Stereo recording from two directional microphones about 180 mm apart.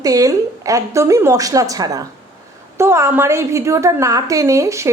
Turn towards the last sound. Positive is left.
turn(degrees=-15)  # may be behind; listen again after turning